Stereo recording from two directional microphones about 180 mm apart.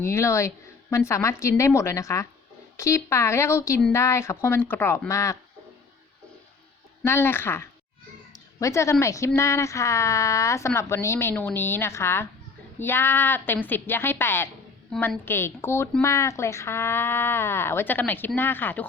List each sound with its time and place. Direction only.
0.0 s a woman's voice: 15° left (ahead or behind)
7.0 s a woman's voice: 15° left (ahead or behind)